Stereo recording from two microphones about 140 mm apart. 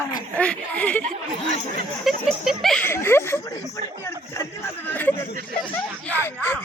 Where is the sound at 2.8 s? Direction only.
15° left (ahead or behind).